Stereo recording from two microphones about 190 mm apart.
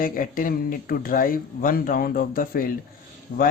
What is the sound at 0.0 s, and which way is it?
Speech, 45° left (ahead or behind).